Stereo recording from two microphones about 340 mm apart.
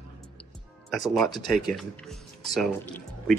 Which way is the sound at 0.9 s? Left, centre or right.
Centre.